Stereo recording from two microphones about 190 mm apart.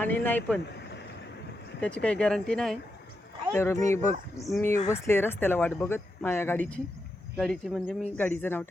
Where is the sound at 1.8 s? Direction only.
5° left (ahead or behind).